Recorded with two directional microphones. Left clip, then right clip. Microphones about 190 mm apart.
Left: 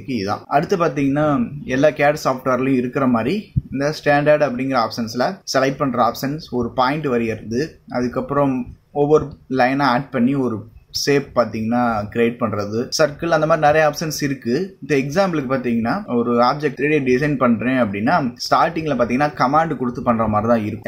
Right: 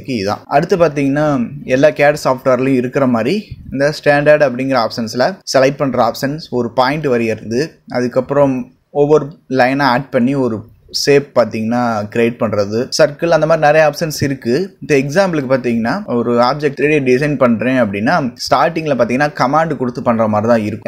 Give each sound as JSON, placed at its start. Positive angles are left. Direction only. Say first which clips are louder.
{"t": 0.1, "sound": "speech", "louder": "right 5 dB", "side_deg": -30}